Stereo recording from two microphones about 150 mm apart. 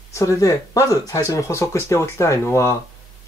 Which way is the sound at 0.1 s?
20° left (ahead or behind).